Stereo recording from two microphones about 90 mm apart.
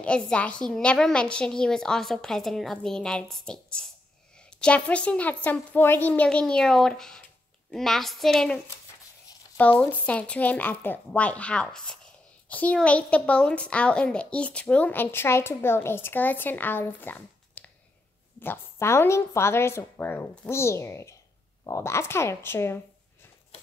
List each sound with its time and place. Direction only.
0.0 s a woman's voice: 10° left (ahead or behind)
6.2 s a woman's voice: 10° left (ahead or behind)
9.6 s a woman's voice: 15° left (ahead or behind)